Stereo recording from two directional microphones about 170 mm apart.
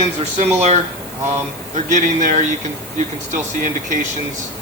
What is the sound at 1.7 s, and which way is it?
Speech, 45° right (ahead or behind).